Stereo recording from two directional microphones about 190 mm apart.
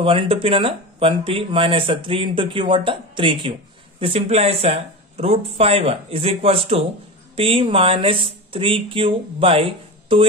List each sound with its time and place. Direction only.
0.0 s speech: 30° right (ahead or behind)